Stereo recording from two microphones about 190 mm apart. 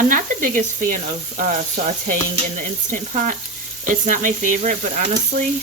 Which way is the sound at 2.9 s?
40° right (ahead or behind).